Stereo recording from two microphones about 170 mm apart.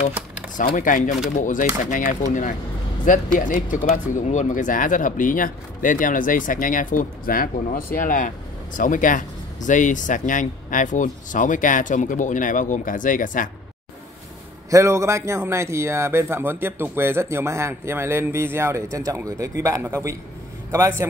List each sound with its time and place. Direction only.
0.7 s speech: 50° left (ahead or behind)
14.7 s a man's voice: 15° right (ahead or behind)